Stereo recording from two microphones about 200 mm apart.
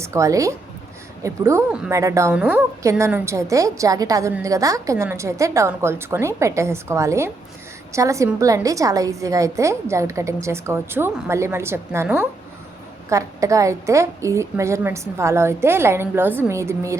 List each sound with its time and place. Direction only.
0.0 s a woman's voice: 15° right (ahead or behind)